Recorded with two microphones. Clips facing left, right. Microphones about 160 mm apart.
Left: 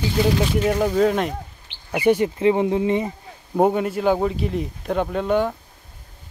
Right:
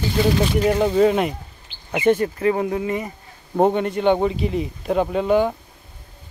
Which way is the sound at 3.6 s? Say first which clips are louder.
Right 1 dB; 5° left (ahead or behind).